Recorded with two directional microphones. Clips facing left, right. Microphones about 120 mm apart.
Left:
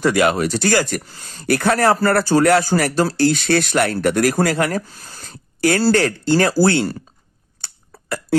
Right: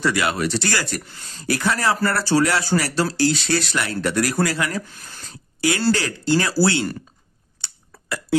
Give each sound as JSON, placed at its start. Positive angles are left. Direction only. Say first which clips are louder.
{"t": 0.0, "sound": "speech", "louder": "left 5 dB", "side_deg": 45}
{"t": 1.0, "sound": "speech", "louder": "left 1 dB", "side_deg": 35}
{"t": 1.4, "sound": "speech", "louder": "left 6 dB", "side_deg": 60}
{"t": 4.8, "sound": "speech", "louder": "left 2 dB", "side_deg": 35}
{"t": 5.3, "sound": "a sound", "louder": "left 5 dB", "side_deg": 55}
{"t": 5.9, "sound": "speech", "louder": "left 4 dB", "side_deg": 50}
{"t": 7.6, "sound": "burping", "louder": "left 2 dB", "side_deg": 50}